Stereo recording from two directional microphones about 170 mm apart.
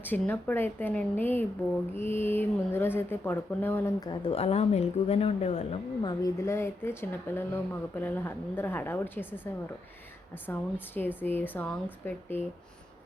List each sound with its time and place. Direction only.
0.0 s a woman's voice: 10° left (ahead or behind)
4.1 s speech: 35° left (ahead or behind)
6.0 s a woman's voice: 20° left (ahead or behind)